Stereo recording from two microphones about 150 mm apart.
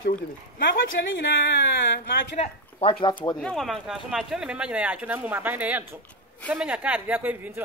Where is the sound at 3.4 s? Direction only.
5° left (ahead or behind).